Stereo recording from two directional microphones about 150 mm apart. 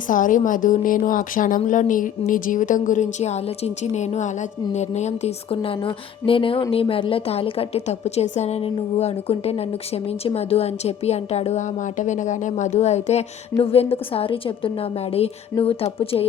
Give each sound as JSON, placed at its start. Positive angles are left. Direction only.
{"t": 0.1, "sound": "a woman's voice", "side_deg": 60}